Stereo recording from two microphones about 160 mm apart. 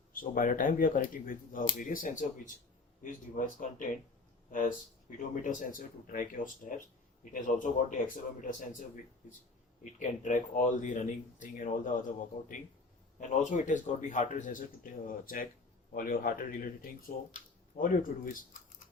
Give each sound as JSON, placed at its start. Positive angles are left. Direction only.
{"t": 0.1, "sound": "speech", "side_deg": 60}
{"t": 5.3, "sound": "speech", "side_deg": 55}
{"t": 10.0, "sound": "speech", "side_deg": 50}